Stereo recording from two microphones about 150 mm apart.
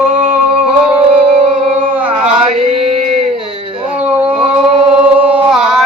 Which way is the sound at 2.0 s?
10° right (ahead or behind).